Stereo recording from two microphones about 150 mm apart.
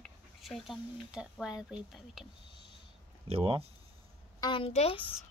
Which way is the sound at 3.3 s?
40° right (ahead or behind).